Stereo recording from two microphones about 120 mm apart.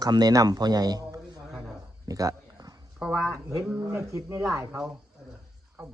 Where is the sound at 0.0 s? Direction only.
35° right (ahead or behind).